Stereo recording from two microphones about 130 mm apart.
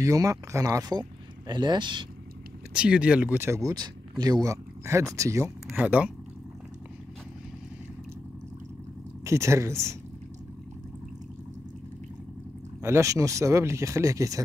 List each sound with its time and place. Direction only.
0.0 s speech: 25° right (ahead or behind)
2.7 s speech: 10° right (ahead or behind); by 5.5 s 25° right (ahead or behind)
5.8 s speech: 10° right (ahead or behind)
9.2 s speech: 20° right (ahead or behind)
12.8 s speech: 20° right (ahead or behind)